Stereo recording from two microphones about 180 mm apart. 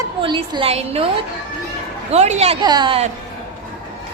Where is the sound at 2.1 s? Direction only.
35° right (ahead or behind).